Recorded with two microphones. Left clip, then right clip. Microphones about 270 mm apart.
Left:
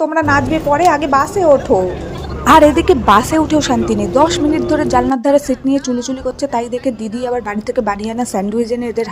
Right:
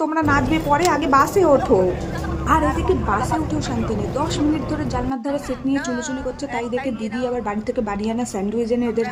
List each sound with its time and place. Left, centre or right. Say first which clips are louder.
0.0 s a woman's voice: left 6 dB; left
2.5 s a woman's voice: left 11 dB; left